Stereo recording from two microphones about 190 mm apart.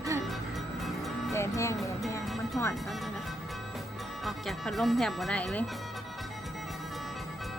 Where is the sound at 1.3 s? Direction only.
15° left (ahead or behind).